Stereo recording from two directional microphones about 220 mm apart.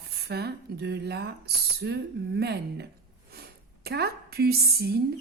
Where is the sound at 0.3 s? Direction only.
45° right (ahead or behind).